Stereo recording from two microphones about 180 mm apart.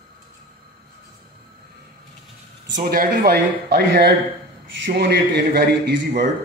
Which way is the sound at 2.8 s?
60° right (ahead or behind).